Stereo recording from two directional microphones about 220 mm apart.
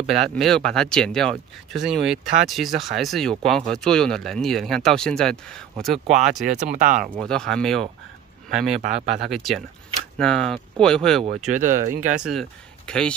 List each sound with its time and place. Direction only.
0.0 s speech: centre (ahead or behind)
6.0 s speech: 35° right (ahead or behind)
7.2 s speech: 5° left (ahead or behind)
11.2 s speech: 35° right (ahead or behind)
12.2 s speech: centre (ahead or behind)